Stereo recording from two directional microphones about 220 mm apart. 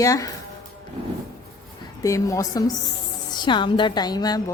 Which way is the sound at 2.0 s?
15° left (ahead or behind).